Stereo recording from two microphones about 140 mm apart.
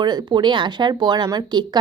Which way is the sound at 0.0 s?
30° right (ahead or behind).